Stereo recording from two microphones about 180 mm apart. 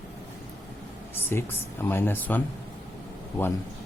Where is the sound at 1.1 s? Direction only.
10° left (ahead or behind).